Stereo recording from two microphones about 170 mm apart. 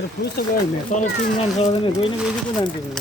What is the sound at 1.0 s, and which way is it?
Speech, 35° left (ahead or behind).